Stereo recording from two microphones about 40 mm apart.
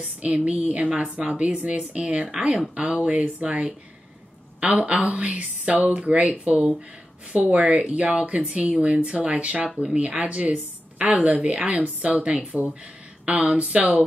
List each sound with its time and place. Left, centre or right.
0.0 s a woman's voice: right
2.0 s a woman's voice: right
7.5 s a woman's voice: right
13.5 s speech: right